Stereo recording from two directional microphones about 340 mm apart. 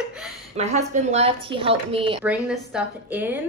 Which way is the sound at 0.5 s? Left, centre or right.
Centre.